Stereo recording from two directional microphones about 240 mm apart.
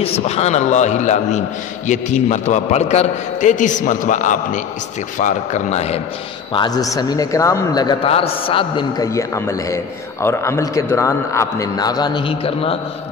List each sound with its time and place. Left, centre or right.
0.0 s a man's voice: left
6.5 s a man's voice: centre